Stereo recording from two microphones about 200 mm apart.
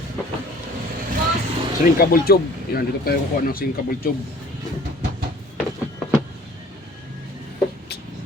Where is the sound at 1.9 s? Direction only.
50° left (ahead or behind).